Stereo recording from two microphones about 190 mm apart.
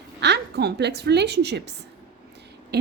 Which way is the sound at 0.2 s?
60° right (ahead or behind).